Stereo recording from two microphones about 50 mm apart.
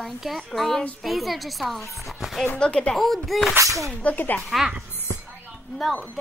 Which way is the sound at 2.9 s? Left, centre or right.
Centre.